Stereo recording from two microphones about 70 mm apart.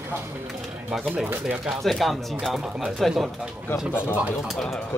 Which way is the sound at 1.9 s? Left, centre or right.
Centre.